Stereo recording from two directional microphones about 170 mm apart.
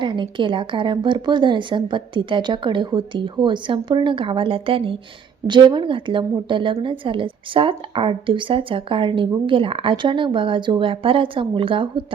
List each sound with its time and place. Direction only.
0.0 s a woman's voice: 30° right (ahead or behind)